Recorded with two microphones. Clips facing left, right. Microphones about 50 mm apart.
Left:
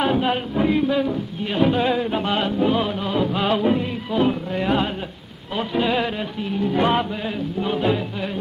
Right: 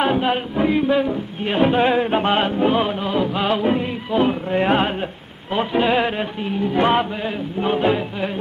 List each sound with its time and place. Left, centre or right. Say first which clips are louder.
0.0 s music: right 2 dB; centre
3.1 s music: right 1 dB; centre
4.5 s speech: right 4 dB; right
5.5 s music: right 3 dB; right